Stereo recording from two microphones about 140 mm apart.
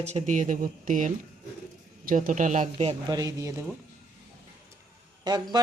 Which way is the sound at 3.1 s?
25° right (ahead or behind).